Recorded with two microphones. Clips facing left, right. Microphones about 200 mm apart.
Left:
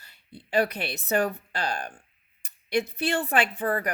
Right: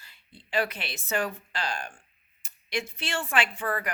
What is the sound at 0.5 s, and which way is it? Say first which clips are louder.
A woman's voice: left 4 dB; 35° left (ahead or behind).